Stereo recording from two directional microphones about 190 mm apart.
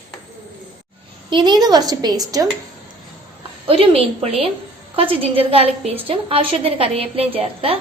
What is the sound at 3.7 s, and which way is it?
A woman's voice, 30° right (ahead or behind).